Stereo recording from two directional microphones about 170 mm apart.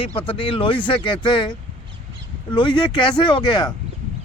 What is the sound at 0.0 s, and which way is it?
Speech, 35° left (ahead or behind).